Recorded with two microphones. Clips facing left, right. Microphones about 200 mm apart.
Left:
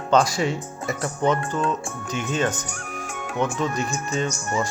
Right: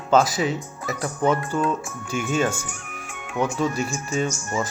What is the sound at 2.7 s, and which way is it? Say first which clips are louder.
Music: left 4 dB; 40° left (ahead or behind).